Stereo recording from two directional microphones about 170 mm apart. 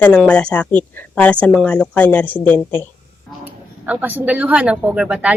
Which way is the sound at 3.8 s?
10° right (ahead or behind).